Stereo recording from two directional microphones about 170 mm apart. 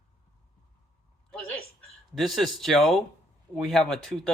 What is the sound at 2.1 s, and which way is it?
A woman's voice, centre (ahead or behind).